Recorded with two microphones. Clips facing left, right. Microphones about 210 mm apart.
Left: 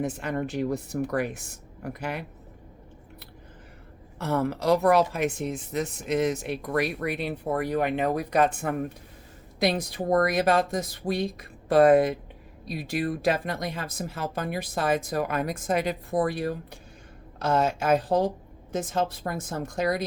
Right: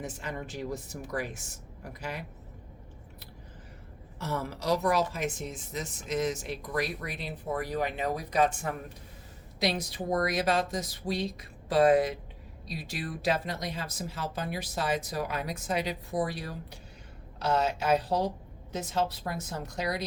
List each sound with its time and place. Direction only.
0.0 s speech: 60° left (ahead or behind)
4.2 s speech: 60° left (ahead or behind)